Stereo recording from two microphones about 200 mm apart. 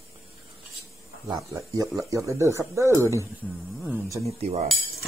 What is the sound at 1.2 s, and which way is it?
Speech, 20° right (ahead or behind).